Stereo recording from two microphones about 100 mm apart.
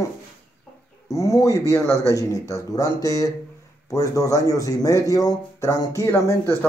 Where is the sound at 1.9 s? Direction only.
30° right (ahead or behind).